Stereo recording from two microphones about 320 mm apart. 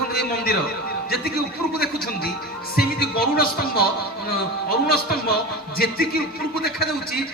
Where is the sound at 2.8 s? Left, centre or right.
Left.